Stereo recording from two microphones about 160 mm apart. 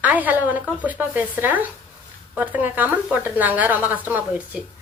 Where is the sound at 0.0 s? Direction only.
10° right (ahead or behind).